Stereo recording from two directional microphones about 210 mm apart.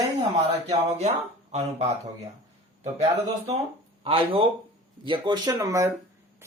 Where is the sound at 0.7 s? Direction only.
30° right (ahead or behind).